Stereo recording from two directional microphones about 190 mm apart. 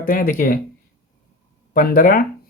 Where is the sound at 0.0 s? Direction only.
50° left (ahead or behind).